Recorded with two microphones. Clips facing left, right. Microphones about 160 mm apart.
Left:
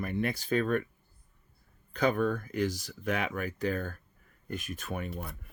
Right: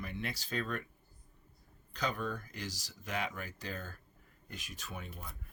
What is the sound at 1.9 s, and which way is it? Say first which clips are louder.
Speech: left 9 dB; 55° left (ahead or behind).